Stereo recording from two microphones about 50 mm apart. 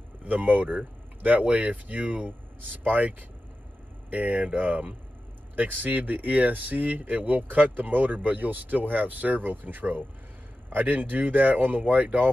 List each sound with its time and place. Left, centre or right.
0.2 s speech: right